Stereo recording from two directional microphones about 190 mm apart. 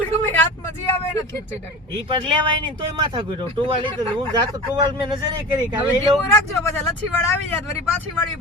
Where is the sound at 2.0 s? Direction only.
25° right (ahead or behind).